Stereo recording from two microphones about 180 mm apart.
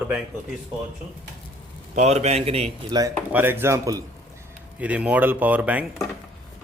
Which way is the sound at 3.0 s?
15° right (ahead or behind).